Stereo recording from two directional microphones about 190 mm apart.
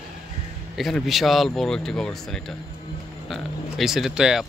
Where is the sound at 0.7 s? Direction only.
Centre (ahead or behind).